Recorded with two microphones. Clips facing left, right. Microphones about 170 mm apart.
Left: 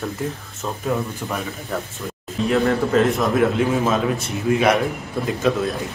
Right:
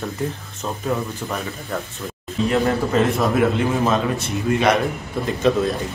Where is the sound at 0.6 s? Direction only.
Centre (ahead or behind).